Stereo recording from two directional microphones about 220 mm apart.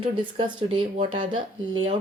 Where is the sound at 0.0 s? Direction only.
25° right (ahead or behind).